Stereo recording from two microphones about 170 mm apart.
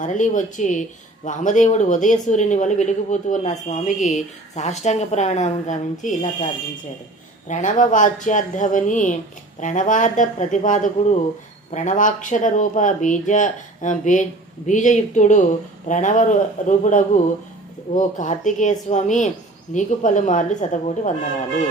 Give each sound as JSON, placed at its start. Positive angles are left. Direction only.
{"t": 0.0, "sound": "speech", "side_deg": 45}